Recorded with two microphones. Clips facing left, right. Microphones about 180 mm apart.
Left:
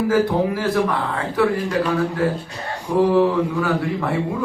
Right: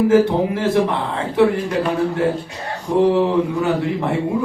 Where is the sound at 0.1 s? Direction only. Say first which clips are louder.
Right 3 dB; 25° right (ahead or behind).